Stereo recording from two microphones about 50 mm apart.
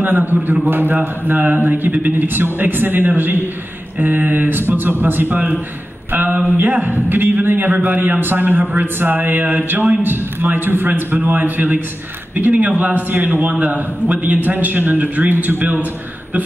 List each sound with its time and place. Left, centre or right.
0.0 s a man's voice: right
13.5 s a man's voice: right